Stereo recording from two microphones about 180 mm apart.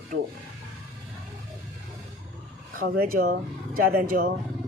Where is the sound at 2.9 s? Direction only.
55° right (ahead or behind).